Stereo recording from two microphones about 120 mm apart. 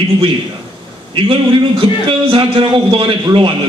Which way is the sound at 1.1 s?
50° right (ahead or behind).